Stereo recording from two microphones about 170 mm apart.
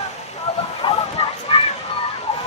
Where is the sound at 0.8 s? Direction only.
35° left (ahead or behind).